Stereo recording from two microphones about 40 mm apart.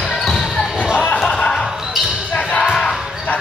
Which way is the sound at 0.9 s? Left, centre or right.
Left.